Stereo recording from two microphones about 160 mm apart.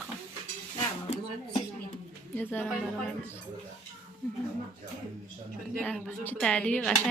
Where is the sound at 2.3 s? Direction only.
10° left (ahead or behind).